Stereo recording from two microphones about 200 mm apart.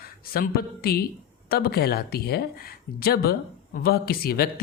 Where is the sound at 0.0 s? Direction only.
45° left (ahead or behind).